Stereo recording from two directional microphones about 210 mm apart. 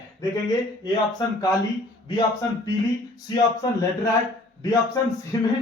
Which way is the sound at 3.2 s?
20° left (ahead or behind).